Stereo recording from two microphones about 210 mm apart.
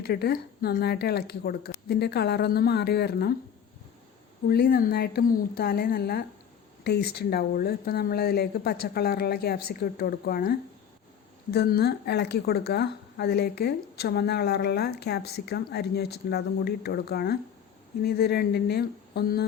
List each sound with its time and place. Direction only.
0.0 s speech: 50° left (ahead or behind)
4.4 s speech: 45° left (ahead or behind)